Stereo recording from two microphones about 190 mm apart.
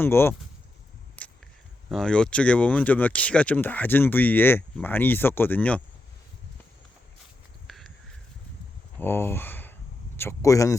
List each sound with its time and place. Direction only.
0.0 s speech: 10° left (ahead or behind)
1.9 s speech: 5° left (ahead or behind)
7.7 s a sound: centre (ahead or behind)
9.0 s speech: 10° left (ahead or behind)